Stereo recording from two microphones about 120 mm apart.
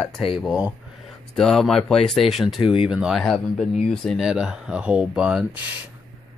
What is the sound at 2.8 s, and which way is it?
Speech, 5° right (ahead or behind).